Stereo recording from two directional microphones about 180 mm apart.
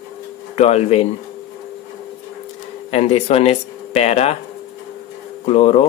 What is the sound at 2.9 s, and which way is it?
Speech, 35° left (ahead or behind).